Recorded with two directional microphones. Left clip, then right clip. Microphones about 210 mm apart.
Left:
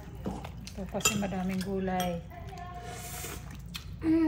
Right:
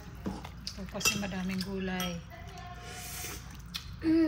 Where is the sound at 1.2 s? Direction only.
10° right (ahead or behind).